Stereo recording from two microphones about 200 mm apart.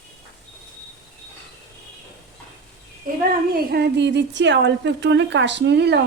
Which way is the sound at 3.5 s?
55° right (ahead or behind).